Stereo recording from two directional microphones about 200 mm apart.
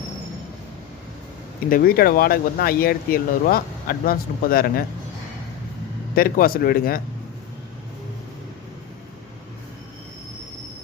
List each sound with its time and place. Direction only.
1.7 s speech: 50° left (ahead or behind)
6.1 s speech: 45° left (ahead or behind)